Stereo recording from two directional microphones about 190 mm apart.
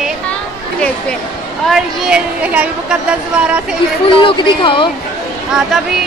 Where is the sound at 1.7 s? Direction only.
5° right (ahead or behind).